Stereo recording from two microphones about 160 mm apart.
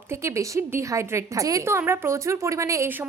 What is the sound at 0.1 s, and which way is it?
A woman's voice, 15° right (ahead or behind).